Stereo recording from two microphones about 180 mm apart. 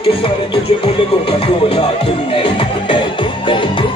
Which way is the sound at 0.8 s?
30° left (ahead or behind).